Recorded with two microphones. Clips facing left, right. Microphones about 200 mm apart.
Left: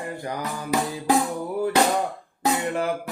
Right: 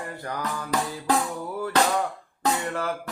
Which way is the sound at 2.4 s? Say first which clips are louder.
Left 3 dB; 15° left (ahead or behind).